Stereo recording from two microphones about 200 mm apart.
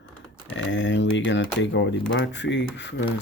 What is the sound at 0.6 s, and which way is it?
Speech, 65° left (ahead or behind).